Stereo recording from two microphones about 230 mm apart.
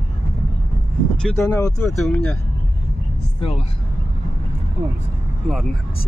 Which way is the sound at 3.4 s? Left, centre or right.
Left.